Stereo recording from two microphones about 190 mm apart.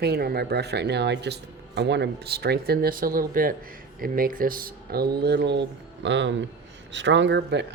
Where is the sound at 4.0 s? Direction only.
50° right (ahead or behind).